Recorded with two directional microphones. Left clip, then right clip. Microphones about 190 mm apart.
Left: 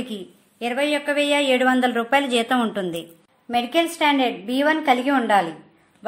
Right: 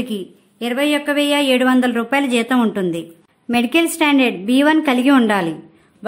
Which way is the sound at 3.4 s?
35° right (ahead or behind).